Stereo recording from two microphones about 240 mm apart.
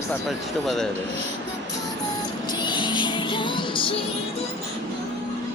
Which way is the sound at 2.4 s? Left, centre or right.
Centre.